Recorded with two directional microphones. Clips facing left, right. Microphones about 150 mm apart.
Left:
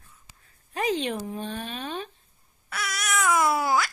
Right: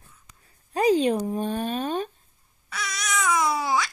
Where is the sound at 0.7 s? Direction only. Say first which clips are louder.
Right 7 dB; 35° right (ahead or behind).